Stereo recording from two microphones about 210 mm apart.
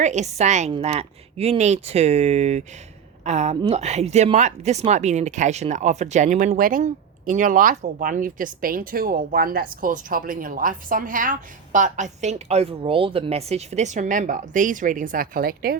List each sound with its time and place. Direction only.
0.0 s speech: 35° right (ahead or behind)